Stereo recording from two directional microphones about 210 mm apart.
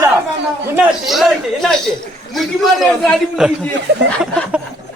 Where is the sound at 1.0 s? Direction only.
Centre (ahead or behind).